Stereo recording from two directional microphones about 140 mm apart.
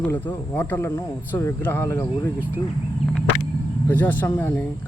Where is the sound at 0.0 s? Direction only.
10° left (ahead or behind).